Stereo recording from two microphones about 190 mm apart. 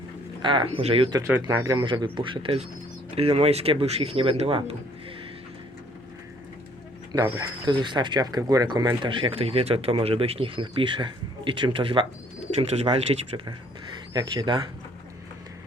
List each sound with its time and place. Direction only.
0.4 s speech: 25° right (ahead or behind)
1.2 s speech: 15° right (ahead or behind)
7.1 s speech: 20° right (ahead or behind)